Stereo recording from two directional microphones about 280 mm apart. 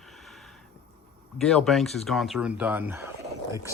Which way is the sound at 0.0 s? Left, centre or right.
Centre.